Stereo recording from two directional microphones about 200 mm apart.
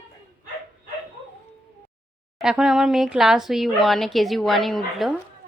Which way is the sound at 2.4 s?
5° right (ahead or behind).